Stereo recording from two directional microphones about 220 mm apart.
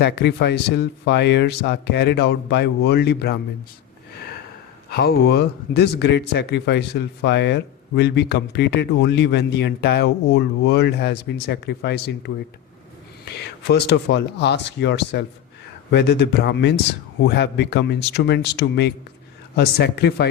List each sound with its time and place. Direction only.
0.0 s speech: 50° left (ahead or behind)
4.9 s speech: 45° left (ahead or behind)